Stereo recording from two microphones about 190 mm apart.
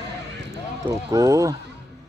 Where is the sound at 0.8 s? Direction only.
15° right (ahead or behind).